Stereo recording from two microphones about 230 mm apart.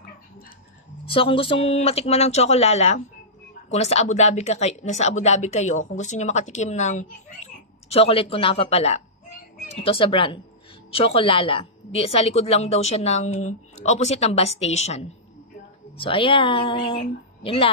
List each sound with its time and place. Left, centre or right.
1.0 s a woman's voice: left